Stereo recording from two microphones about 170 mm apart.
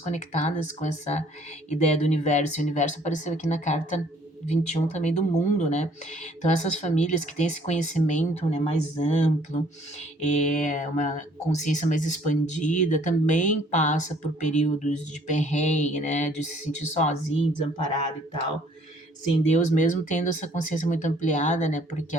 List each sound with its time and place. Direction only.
0.0 s speech: 40° left (ahead or behind)
19.5 s speech: 45° left (ahead or behind)